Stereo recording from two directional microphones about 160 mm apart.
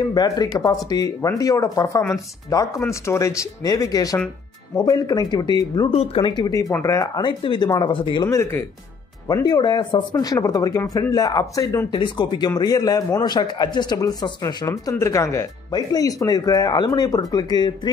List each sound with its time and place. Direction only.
0.0 s a man's voice: 25° left (ahead or behind)